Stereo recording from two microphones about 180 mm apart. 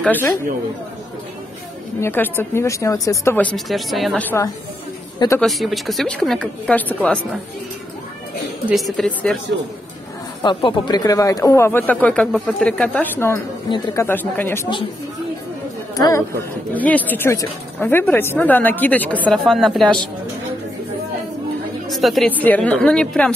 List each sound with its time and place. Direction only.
0.0 s a woman's voice: 10° left (ahead or behind)
2.0 s a woman's voice: 10° left (ahead or behind)
8.6 s a woman's voice: centre (ahead or behind)
10.4 s a woman's voice: 25° left (ahead or behind)
13.7 s speech: 25° left (ahead or behind)
14.0 s a woman's voice: 10° left (ahead or behind)
16.0 s a woman's voice: 15° left (ahead or behind); by 20.0 s centre (ahead or behind)
21.9 s a woman's voice: centre (ahead or behind)